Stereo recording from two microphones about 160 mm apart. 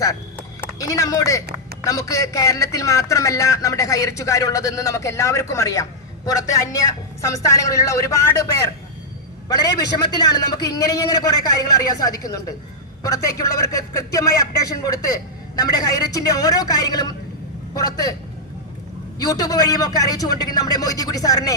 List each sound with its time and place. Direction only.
0.6 s a man's voice: 20° left (ahead or behind)
19.2 s a man's voice: 20° left (ahead or behind)